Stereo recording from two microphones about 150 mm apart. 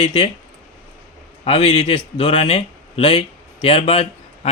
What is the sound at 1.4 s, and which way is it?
A man's voice, 40° left (ahead or behind).